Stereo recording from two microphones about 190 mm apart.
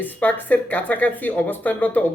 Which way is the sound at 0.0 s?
10° left (ahead or behind).